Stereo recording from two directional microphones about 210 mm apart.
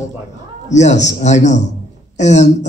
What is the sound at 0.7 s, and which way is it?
A man's voice, 35° left (ahead or behind).